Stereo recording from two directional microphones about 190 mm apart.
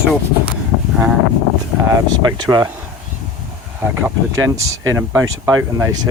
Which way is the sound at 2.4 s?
20° right (ahead or behind).